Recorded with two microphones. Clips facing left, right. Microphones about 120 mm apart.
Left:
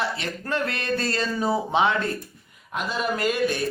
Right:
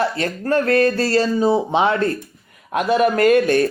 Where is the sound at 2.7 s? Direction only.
60° right (ahead or behind).